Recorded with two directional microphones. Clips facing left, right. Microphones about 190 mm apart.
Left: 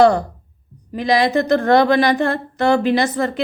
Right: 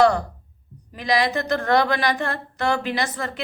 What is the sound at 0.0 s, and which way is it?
Speech, 25° left (ahead or behind).